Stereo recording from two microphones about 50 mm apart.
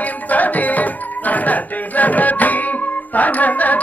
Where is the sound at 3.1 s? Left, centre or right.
Left.